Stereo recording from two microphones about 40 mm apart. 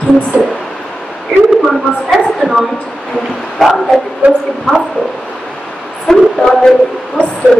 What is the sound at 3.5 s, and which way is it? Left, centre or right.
Speech, centre.